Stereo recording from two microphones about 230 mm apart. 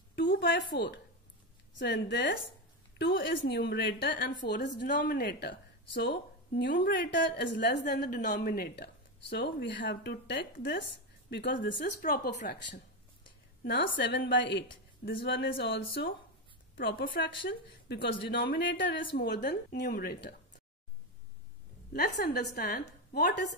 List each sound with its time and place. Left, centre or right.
0.1 s a sound: left
1.8 s speech: left
13.7 s speech: left
19.4 s speech: left
21.9 s speech: left